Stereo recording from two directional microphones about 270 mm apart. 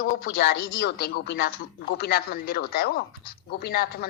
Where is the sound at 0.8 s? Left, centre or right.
Left.